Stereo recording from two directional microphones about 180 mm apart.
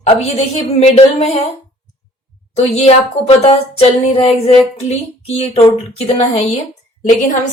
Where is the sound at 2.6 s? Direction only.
35° left (ahead or behind).